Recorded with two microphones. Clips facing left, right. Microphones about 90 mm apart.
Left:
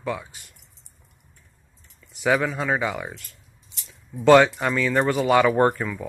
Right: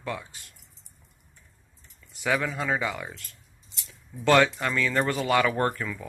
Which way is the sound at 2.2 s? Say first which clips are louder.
Left 5 dB; 15° left (ahead or behind).